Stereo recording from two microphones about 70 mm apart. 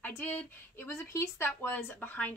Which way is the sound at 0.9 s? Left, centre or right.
Left.